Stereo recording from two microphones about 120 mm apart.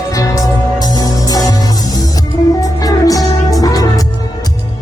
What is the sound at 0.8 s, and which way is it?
Music, 30° left (ahead or behind).